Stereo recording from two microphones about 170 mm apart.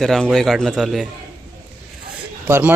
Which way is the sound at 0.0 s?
Centre (ahead or behind).